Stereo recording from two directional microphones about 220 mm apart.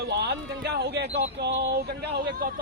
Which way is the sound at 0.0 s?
50° right (ahead or behind).